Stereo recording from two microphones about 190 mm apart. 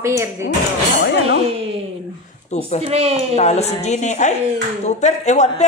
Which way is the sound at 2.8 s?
30° right (ahead or behind).